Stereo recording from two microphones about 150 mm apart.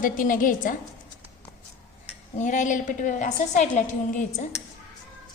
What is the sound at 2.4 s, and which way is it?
A woman's voice, 55° left (ahead or behind).